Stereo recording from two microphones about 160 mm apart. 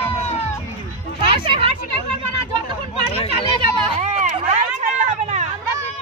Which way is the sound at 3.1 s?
35° left (ahead or behind).